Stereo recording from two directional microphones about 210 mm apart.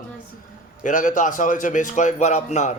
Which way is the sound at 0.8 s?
35° left (ahead or behind).